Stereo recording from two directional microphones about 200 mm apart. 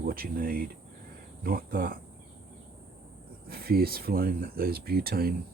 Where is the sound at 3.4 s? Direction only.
50° right (ahead or behind).